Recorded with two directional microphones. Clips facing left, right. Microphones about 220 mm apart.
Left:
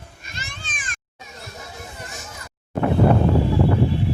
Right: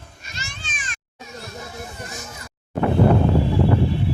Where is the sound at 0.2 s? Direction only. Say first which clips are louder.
Even; 55° left (ahead or behind).